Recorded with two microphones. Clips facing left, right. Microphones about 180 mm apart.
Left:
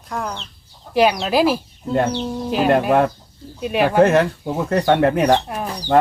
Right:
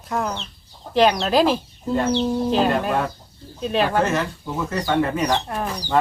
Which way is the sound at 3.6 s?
10° left (ahead or behind).